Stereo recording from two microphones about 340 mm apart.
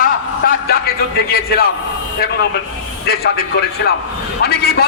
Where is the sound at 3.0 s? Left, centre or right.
Left.